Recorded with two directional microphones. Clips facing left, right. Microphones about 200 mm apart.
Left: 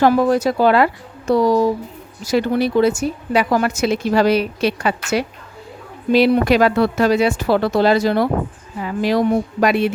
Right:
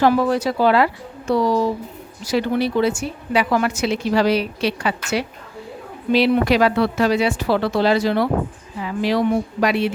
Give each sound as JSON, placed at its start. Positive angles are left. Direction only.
{"t": 0.0, "sound": "a woman's voice", "side_deg": 45}